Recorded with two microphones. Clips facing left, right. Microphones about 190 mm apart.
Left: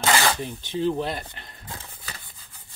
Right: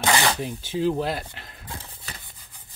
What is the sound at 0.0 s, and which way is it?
Zipper, 15° right (ahead or behind).